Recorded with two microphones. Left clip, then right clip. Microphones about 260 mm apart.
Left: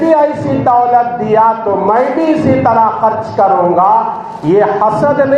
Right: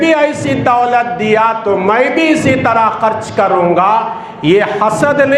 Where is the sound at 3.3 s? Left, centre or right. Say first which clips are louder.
Left 1 dB; right.